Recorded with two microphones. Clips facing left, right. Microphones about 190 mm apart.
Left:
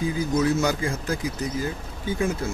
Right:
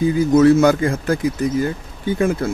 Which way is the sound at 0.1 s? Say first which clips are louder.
Right 12 dB; 60° right (ahead or behind).